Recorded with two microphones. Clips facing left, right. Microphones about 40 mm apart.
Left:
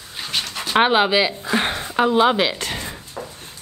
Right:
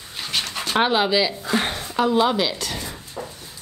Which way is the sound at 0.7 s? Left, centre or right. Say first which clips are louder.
Left 3 dB; left.